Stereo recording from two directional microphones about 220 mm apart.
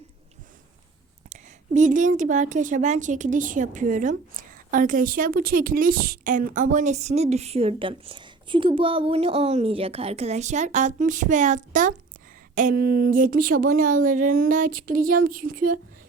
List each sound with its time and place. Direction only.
1.3 s a woman's voice: 35° right (ahead or behind)